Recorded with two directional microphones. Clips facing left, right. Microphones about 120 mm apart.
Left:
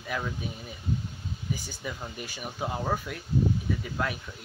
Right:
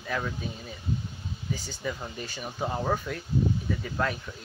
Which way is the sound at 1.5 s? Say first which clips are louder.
Right 3 dB; 15° left (ahead or behind).